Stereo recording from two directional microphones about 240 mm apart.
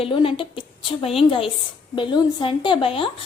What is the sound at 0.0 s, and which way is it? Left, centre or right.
A woman's voice, left.